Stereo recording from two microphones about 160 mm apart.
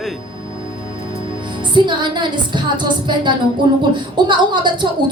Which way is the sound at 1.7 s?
30° right (ahead or behind).